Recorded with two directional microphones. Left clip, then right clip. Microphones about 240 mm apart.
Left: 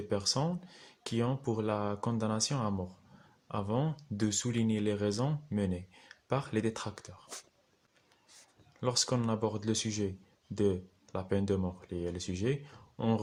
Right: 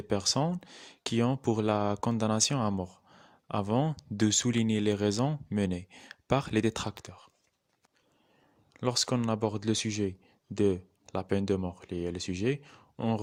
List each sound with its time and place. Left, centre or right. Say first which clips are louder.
0.1 s speech: right 4 dB; right
8.8 s speech: right 2 dB; right